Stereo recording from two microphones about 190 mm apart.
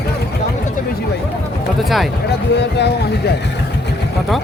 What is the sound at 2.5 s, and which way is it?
Speech, 65° left (ahead or behind).